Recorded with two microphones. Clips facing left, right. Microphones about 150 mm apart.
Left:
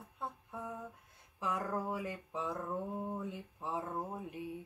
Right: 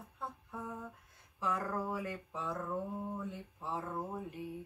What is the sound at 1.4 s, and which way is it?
Speech, 15° left (ahead or behind).